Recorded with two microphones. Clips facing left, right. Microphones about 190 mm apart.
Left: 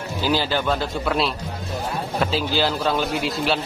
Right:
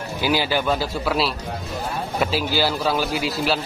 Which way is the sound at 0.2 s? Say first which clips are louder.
Right 1 dB; 10° right (ahead or behind).